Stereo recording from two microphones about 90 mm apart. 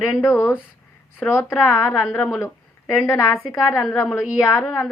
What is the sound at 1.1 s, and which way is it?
A woman's voice, 25° left (ahead or behind).